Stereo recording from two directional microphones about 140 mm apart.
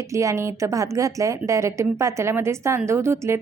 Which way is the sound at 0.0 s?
25° right (ahead or behind).